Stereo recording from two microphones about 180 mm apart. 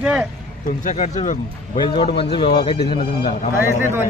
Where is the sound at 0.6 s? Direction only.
45° left (ahead or behind).